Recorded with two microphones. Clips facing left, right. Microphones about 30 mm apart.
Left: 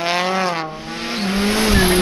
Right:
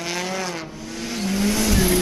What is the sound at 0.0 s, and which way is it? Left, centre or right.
Vehicle, left.